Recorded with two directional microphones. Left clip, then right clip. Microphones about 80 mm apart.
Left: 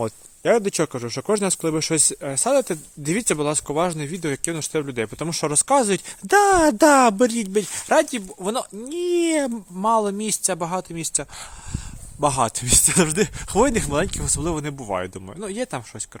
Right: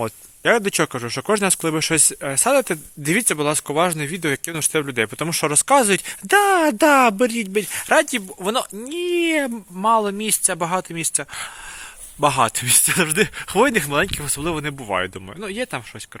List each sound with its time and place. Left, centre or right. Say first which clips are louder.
0.4 s speech: right 2 dB; centre
6.4 s speech: left 2 dB; left
7.8 s speech: right 2 dB; centre
9.0 s speech: right 1 dB; left
10.2 s speech: right 2 dB; centre
12.5 s speech: right 1 dB; centre
15.4 s speech: right 2 dB; left